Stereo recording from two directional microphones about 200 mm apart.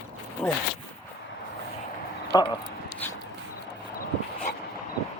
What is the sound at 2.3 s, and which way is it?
Speech, 20° left (ahead or behind).